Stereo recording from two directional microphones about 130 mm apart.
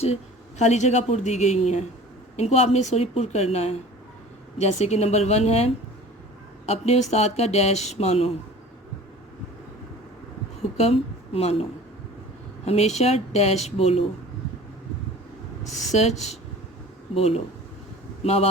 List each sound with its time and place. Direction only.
0.6 s a woman's voice: 65° left (ahead or behind)
10.8 s a woman's voice: 50° left (ahead or behind)
12.6 s speech: 55° left (ahead or behind)
15.6 s speech: 60° left (ahead or behind)